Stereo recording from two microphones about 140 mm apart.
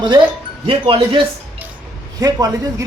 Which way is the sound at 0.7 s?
40° right (ahead or behind).